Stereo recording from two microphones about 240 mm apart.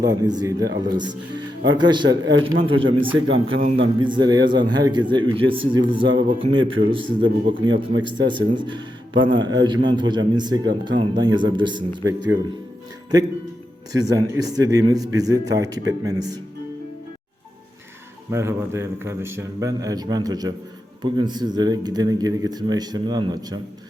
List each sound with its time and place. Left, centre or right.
0.0 s a man's voice: centre
6.6 s speech: right
7.2 s a man's voice: centre
13.9 s speech: centre
18.3 s speech: centre